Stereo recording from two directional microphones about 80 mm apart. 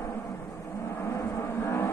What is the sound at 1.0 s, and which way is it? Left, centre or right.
Vehicle, left.